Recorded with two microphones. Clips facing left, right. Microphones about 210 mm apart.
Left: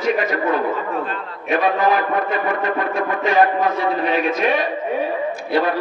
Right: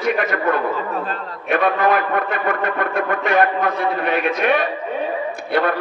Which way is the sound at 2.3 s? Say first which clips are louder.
Left 1 dB; 60° right (ahead or behind).